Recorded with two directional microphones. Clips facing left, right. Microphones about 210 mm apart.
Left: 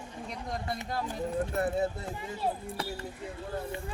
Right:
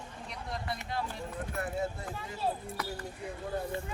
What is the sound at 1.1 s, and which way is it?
Speech, 35° left (ahead or behind).